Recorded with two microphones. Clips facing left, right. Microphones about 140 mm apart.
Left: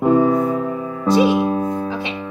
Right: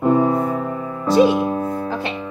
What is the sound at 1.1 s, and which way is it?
Music, 5° left (ahead or behind).